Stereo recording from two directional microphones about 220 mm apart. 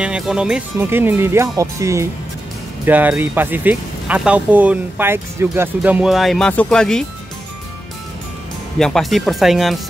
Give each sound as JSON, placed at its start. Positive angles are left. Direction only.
{"t": 0.0, "sound": "speech", "side_deg": -5}
{"t": 8.7, "sound": "speech", "side_deg": 0}